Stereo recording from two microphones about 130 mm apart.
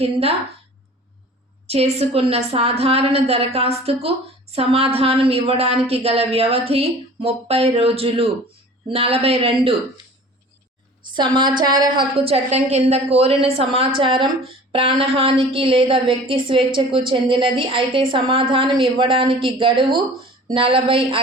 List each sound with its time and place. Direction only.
0.0 s a woman's voice: 50° right (ahead or behind)
1.6 s a woman's voice: 50° right (ahead or behind)
11.1 s speech: 35° right (ahead or behind)
12.1 s a woman's voice: 50° right (ahead or behind)